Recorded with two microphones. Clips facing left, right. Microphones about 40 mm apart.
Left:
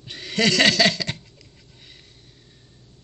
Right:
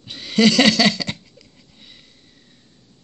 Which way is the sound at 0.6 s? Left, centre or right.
Left.